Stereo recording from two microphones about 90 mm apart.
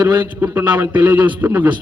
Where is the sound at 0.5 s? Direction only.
20° right (ahead or behind).